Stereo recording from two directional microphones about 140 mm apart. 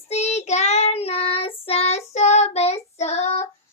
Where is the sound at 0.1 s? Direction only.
50° left (ahead or behind).